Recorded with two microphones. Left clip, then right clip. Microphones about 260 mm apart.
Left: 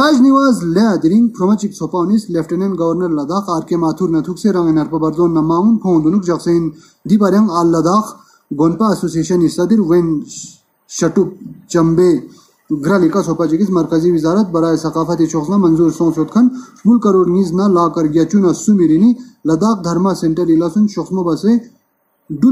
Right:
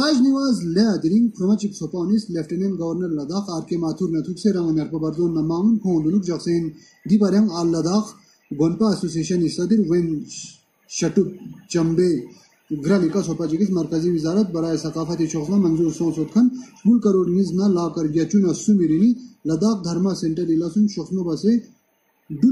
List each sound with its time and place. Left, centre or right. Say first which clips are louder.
0.0 s speech: left 9 dB; left